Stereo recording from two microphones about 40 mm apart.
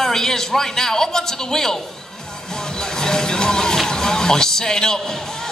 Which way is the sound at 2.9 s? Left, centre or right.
Centre.